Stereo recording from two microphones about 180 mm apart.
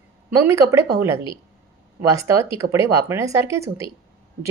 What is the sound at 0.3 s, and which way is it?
Speech, 15° right (ahead or behind).